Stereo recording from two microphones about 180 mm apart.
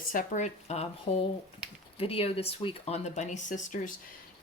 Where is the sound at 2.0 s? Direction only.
30° left (ahead or behind).